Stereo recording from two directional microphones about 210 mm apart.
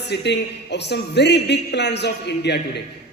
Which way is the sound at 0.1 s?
55° left (ahead or behind).